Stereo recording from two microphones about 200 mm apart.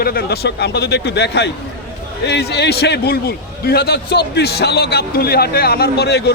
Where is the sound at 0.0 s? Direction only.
50° left (ahead or behind).